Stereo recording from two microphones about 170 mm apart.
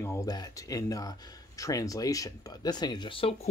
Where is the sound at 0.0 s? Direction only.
20° left (ahead or behind).